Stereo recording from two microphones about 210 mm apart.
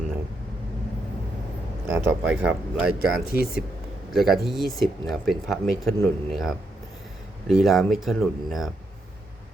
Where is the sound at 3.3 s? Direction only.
45° left (ahead or behind).